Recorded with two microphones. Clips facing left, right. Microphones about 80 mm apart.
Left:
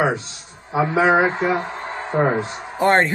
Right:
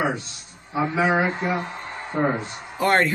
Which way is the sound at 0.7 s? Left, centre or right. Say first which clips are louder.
Left 5 dB; left.